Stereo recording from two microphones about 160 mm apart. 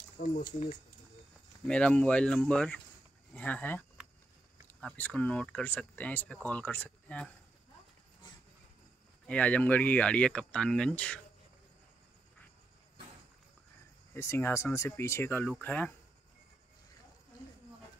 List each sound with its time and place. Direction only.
0.2 s speech: 60° left (ahead or behind)
1.7 s speech: 5° left (ahead or behind)
9.2 s speech: 10° left (ahead or behind)
14.1 s speech: 15° left (ahead or behind)